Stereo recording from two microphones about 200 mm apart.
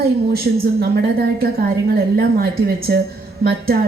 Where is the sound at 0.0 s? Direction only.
50° right (ahead or behind).